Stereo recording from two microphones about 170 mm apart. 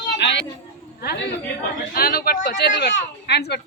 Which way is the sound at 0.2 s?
90° left.